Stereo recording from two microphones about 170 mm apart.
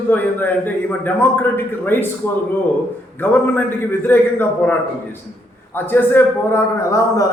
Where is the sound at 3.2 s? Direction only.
10° left (ahead or behind).